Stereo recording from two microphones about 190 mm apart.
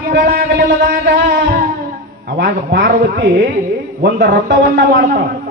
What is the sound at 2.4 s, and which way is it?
A man's voice, 60° right (ahead or behind).